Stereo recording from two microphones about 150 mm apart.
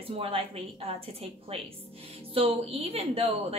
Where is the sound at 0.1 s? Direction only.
40° right (ahead or behind).